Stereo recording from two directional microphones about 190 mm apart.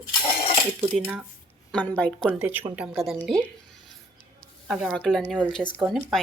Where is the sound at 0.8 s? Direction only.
5° right (ahead or behind).